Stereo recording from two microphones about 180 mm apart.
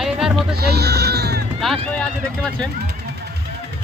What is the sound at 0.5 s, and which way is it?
Speech, 65° right (ahead or behind).